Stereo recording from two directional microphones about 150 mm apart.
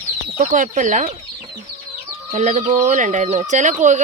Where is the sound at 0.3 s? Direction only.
55° right (ahead or behind).